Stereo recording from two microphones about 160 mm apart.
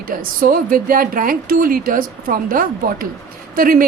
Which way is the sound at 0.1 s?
60° right (ahead or behind).